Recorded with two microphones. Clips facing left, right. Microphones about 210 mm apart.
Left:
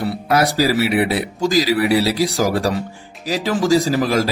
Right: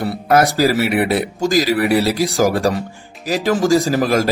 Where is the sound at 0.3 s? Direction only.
50° right (ahead or behind).